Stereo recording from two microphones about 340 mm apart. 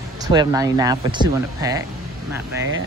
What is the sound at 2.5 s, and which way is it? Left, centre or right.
Speech, right.